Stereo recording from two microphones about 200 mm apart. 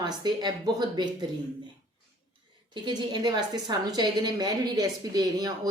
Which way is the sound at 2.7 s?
20° right (ahead or behind).